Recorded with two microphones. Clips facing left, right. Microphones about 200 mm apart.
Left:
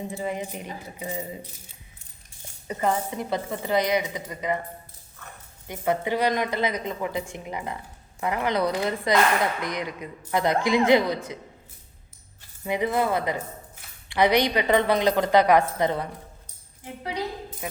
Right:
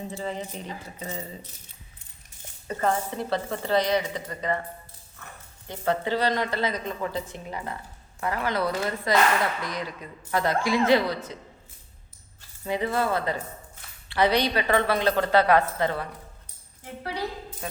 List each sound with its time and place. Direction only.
0.1 s a woman's voice: 15° left (ahead or behind)
2.6 s a woman's voice: 15° left (ahead or behind)
5.6 s a woman's voice: 15° left (ahead or behind)
12.6 s a woman's voice: 15° left (ahead or behind)